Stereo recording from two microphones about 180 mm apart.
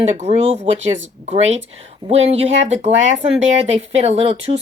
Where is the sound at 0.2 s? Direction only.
35° right (ahead or behind).